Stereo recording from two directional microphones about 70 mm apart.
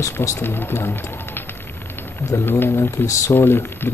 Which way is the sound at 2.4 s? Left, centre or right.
Left.